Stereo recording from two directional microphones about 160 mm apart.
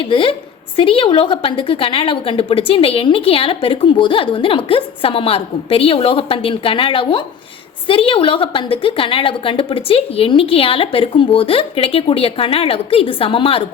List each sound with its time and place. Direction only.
0.0 s a woman's voice: 35° left (ahead or behind)